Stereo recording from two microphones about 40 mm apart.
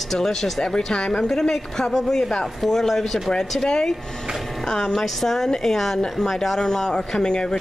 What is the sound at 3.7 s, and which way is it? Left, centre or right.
Speech, centre.